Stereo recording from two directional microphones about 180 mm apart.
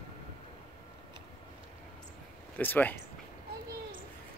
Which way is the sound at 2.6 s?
10° left (ahead or behind).